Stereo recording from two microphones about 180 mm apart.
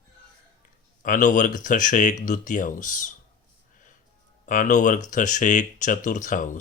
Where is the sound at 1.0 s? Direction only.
45° left (ahead or behind).